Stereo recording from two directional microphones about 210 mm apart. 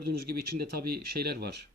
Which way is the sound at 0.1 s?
45° right (ahead or behind).